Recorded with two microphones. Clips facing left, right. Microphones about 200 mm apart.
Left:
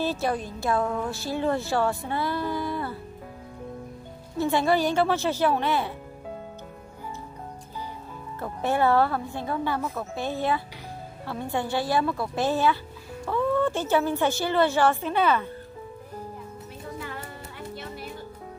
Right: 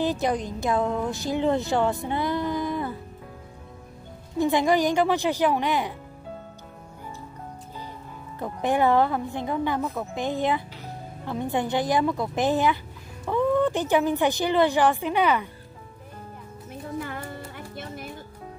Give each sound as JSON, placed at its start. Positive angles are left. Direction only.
{"t": 0.0, "sound": "a woman's voice", "side_deg": -15}
{"t": 4.4, "sound": "a woman's voice", "side_deg": -15}
{"t": 8.4, "sound": "a woman's voice", "side_deg": -15}